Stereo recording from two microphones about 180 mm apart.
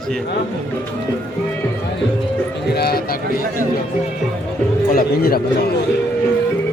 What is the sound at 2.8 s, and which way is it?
Run, 60° left (ahead or behind).